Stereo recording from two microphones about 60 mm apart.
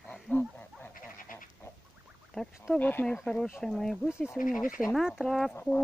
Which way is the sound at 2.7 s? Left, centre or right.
Left.